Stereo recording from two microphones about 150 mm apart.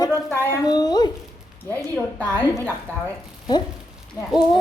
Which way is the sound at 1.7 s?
10° left (ahead or behind).